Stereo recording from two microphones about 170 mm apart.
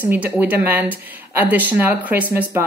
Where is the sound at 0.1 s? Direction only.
10° right (ahead or behind).